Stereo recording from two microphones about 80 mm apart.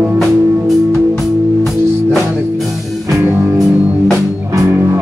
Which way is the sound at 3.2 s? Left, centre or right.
Right.